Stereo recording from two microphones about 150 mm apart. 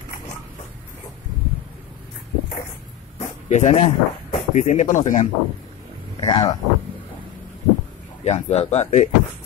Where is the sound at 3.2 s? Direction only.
50° left (ahead or behind).